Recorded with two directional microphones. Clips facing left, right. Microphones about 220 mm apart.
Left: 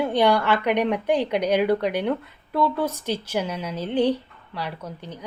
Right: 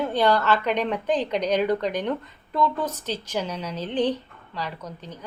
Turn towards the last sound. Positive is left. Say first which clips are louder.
# left 2 dB
turn(degrees=10)  # may be behind; listen again after turning